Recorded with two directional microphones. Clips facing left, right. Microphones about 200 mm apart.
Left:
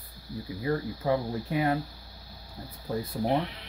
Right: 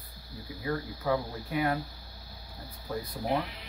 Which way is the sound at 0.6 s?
30° left (ahead or behind).